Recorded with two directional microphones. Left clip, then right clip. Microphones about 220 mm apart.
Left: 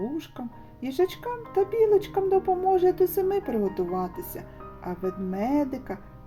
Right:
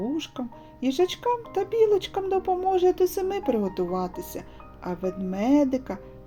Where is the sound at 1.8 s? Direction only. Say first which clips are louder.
Right 1 dB; 40° right (ahead or behind).